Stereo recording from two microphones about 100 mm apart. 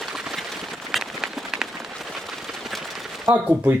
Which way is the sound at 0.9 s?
5° right (ahead or behind).